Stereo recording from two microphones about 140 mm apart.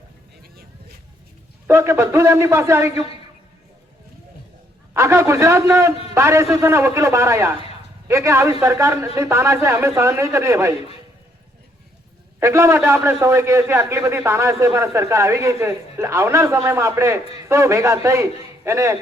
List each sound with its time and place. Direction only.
1.6 s a man's voice: 20° right (ahead or behind)
4.9 s a man's voice: 20° right (ahead or behind)
12.4 s a man's voice: 20° right (ahead or behind)